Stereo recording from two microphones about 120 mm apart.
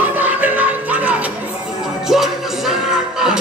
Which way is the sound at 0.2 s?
15° right (ahead or behind).